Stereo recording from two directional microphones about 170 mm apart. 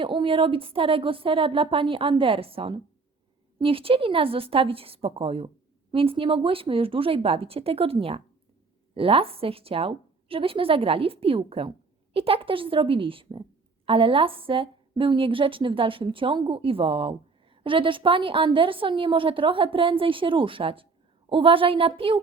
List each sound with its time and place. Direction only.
0.0 s a woman's voice: 30° right (ahead or behind)